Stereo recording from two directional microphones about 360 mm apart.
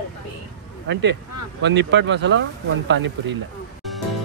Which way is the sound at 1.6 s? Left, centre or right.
Right.